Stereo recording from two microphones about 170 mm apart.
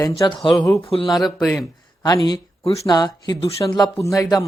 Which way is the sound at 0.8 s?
35° left (ahead or behind).